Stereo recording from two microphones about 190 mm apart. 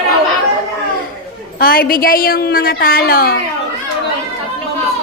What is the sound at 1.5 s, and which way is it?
A woman's voice, 50° left (ahead or behind).